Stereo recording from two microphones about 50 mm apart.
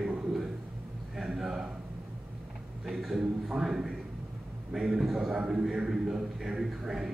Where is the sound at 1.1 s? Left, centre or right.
Centre.